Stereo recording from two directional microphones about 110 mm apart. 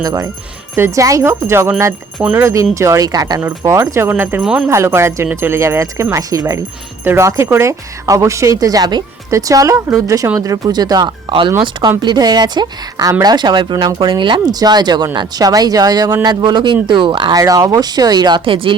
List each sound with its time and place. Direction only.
0.0 s a woman's voice: 35° right (ahead or behind)
4.4 s speech: 5° right (ahead or behind)
4.7 s a woman's voice: 25° right (ahead or behind)
11.3 s speech: 50° right (ahead or behind)
12.0 s speech: 40° right (ahead or behind)
17.3 s speech: 35° right (ahead or behind); by 18.7 s 55° right (ahead or behind)